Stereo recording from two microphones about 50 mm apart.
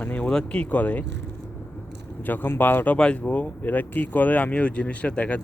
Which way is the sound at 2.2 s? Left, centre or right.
Left.